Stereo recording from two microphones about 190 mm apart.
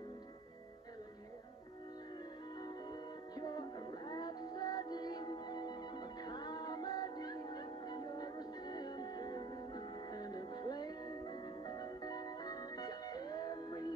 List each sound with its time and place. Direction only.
2.6 s music: 20° left (ahead or behind)